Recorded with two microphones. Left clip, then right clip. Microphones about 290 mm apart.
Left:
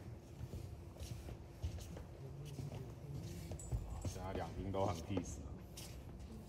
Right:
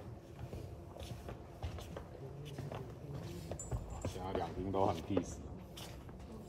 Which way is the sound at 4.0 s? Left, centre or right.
Right.